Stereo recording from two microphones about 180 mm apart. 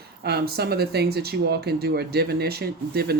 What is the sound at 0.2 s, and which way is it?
Speech, 65° right (ahead or behind).